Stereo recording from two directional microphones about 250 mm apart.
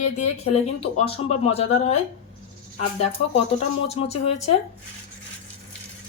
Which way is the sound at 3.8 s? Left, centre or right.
Left.